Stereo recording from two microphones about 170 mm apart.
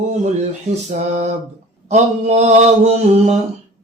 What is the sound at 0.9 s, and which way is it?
Mantra, 45° right (ahead or behind).